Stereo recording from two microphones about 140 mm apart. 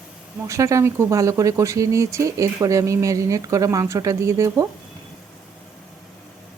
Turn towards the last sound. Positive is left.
turn(degrees=-20)  # may be behind; listen again after turning